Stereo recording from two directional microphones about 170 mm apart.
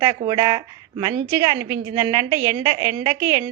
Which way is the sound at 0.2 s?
25° right (ahead or behind).